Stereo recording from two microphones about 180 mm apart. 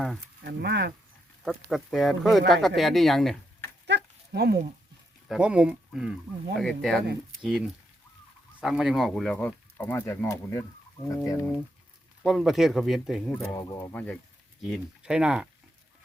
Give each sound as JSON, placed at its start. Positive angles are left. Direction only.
{"t": 0.4, "sound": "speech", "side_deg": -65}
{"t": 1.5, "sound": "speech", "side_deg": 0}
{"t": 3.8, "sound": "a sound", "side_deg": -70}
{"t": 5.3, "sound": "speech", "side_deg": -5}
{"t": 12.2, "sound": "speech", "side_deg": 0}
{"t": 13.5, "sound": "speech", "side_deg": 20}
{"t": 14.6, "sound": "speech", "side_deg": -5}